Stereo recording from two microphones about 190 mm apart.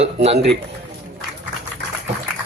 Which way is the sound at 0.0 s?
35° right (ahead or behind).